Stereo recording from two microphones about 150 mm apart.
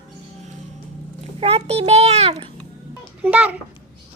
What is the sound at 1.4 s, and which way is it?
A child's voice, 40° right (ahead or behind).